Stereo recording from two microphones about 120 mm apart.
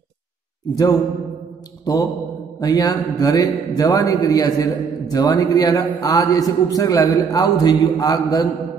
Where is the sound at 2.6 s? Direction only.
30° left (ahead or behind).